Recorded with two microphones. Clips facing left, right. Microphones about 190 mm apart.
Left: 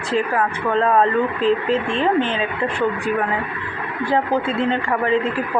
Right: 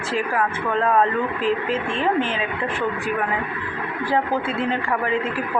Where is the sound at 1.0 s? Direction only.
30° left (ahead or behind).